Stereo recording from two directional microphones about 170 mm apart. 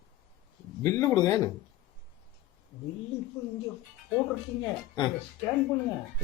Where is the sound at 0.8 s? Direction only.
15° left (ahead or behind).